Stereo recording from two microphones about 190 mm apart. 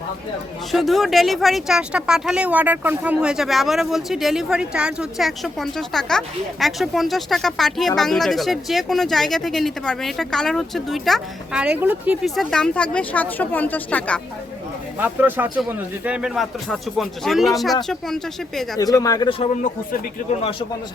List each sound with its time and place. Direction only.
0.7 s speech: centre (ahead or behind)
14.9 s speech: 10° right (ahead or behind)
18.8 s speech: 20° left (ahead or behind)